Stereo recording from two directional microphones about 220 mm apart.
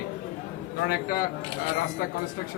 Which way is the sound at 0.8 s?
45° left (ahead or behind).